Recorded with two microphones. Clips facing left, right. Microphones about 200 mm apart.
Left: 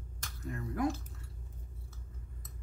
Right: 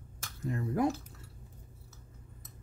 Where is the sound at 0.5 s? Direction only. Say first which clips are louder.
Right 4 dB; 30° right (ahead or behind).